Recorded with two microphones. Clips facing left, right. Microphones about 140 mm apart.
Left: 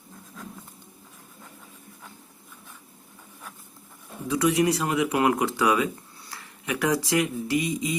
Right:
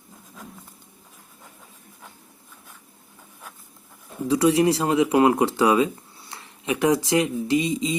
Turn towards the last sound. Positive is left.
turn(degrees=-25)  # may be behind; listen again after turning